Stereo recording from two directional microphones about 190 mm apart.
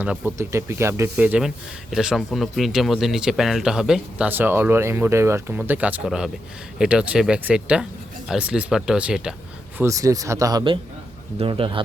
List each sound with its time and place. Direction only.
0.0 s speech: 10° right (ahead or behind)
9.7 s a man's voice: 15° right (ahead or behind)